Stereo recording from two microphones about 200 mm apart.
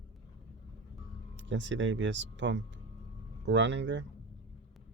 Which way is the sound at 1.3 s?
65° right (ahead or behind).